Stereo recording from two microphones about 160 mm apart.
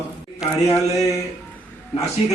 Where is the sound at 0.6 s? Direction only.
20° left (ahead or behind).